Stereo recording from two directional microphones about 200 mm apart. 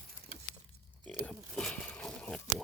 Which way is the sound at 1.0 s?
5° left (ahead or behind).